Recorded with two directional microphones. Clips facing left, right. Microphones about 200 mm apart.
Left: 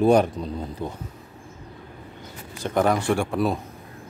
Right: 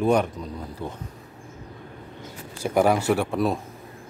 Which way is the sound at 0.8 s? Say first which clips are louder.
Left 1 dB; 15° left (ahead or behind).